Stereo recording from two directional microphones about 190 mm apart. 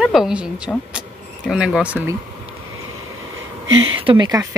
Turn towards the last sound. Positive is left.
turn(degrees=-20)  # may be behind; listen again after turning